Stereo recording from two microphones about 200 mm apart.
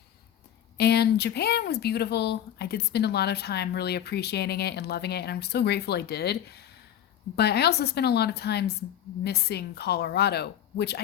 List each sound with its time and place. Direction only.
0.8 s a woman's voice: 55° left (ahead or behind)